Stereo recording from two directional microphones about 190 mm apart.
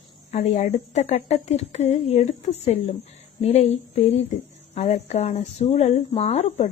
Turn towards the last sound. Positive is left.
turn(degrees=35)  # may be behind; listen again after turning